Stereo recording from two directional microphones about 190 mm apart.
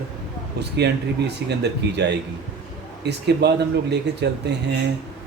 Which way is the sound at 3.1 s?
60° right (ahead or behind).